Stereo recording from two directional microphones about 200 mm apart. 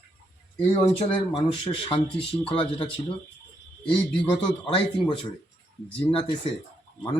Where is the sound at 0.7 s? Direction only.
30° left (ahead or behind).